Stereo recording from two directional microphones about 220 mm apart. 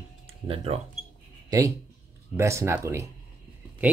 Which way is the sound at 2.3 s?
10° right (ahead or behind).